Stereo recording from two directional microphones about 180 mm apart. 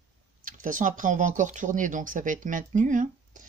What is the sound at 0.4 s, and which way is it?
Speech, 50° right (ahead or behind).